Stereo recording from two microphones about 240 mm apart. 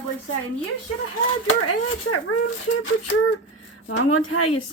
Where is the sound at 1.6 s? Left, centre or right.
Left.